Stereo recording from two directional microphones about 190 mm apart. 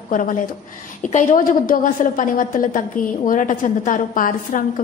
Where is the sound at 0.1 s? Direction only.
45° left (ahead or behind).